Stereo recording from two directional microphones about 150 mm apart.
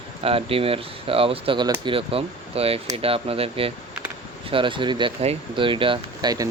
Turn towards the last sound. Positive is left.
turn(degrees=-25)  # may be behind; listen again after turning